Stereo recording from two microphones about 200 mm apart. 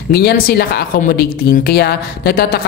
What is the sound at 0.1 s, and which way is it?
A woman's voice, 50° left (ahead or behind).